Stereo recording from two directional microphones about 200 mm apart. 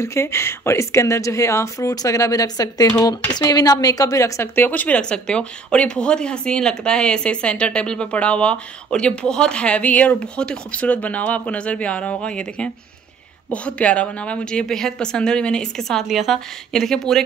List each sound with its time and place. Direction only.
0.0 s speech: 15° left (ahead or behind)